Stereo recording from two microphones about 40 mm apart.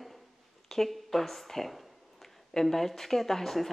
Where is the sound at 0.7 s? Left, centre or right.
Centre.